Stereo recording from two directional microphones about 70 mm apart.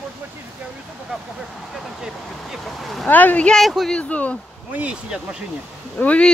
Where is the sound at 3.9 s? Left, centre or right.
Left.